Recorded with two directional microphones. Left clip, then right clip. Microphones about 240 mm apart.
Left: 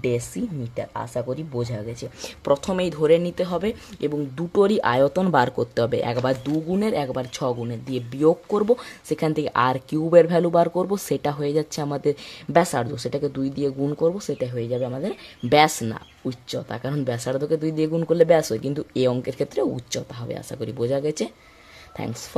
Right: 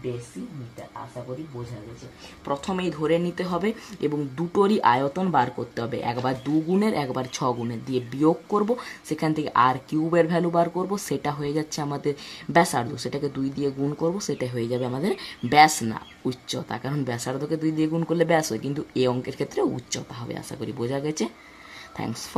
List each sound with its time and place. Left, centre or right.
1.1 s speech: left
2.4 s speech: left